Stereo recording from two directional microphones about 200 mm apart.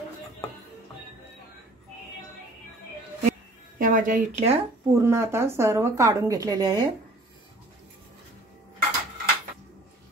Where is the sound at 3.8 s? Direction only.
40° right (ahead or behind).